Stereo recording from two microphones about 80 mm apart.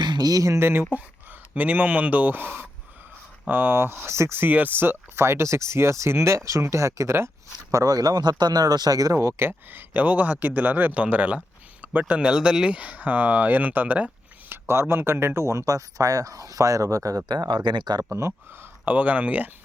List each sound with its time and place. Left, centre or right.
0.0 s speech: right
7.7 s speech: right
9.1 s speech: right
14.5 s speech: right
18.1 s speech: right
18.9 s speech: centre